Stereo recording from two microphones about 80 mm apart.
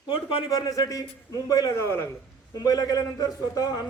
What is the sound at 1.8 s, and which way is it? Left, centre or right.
Speech, left.